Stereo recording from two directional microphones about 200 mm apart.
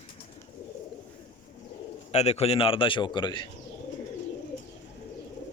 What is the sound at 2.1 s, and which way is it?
A man's voice, 30° left (ahead or behind).